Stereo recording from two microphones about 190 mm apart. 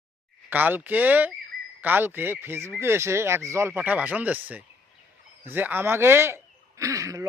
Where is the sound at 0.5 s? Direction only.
10° right (ahead or behind).